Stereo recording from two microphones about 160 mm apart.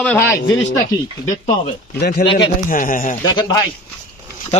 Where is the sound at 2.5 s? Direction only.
55° left (ahead or behind).